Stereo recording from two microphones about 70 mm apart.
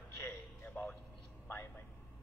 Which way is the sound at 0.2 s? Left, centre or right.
Left.